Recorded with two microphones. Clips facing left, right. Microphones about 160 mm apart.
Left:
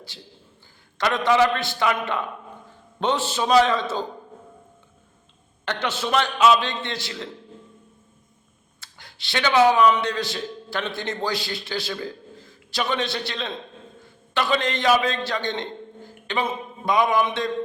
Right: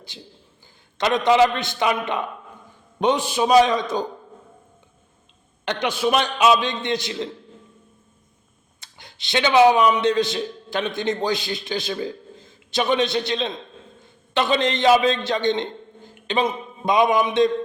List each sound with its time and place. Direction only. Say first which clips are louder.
0.1 s a man's voice: right 2 dB; 20° right (ahead or behind)
5.6 s a man's voice: right 4 dB; 15° right (ahead or behind)
8.8 s a man's voice: right 1 dB; 20° right (ahead or behind)